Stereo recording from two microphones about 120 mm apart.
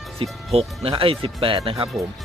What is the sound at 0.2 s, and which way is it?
Speech, 55° right (ahead or behind).